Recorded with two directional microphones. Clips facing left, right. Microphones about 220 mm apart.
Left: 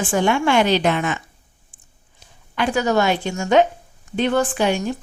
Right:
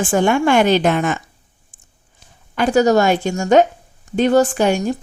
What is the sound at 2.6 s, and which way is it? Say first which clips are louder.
Speech: right 5 dB; 45° right (ahead or behind).